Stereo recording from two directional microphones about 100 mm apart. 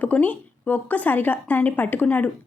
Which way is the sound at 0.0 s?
15° left (ahead or behind).